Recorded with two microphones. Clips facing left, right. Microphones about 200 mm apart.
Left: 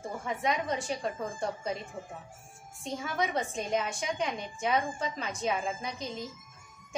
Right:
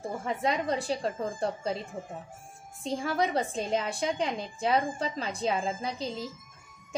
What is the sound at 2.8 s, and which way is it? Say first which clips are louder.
A woman's voice: right 4 dB; 35° right (ahead or behind).